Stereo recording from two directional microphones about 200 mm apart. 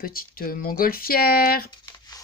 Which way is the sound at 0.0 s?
45° left (ahead or behind).